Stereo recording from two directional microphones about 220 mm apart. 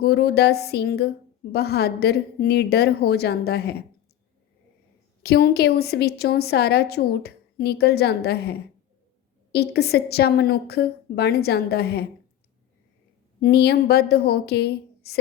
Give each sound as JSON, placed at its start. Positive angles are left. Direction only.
{"t": 0.0, "sound": "a woman's voice", "side_deg": 50}
{"t": 5.2, "sound": "a woman's voice", "side_deg": 45}
{"t": 13.4, "sound": "a woman's voice", "side_deg": 45}